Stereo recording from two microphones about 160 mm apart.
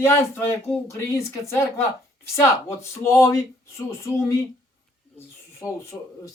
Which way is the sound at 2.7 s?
15° left (ahead or behind).